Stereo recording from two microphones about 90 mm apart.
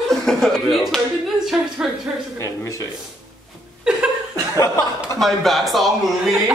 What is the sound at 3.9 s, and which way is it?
Laughter, 10° right (ahead or behind).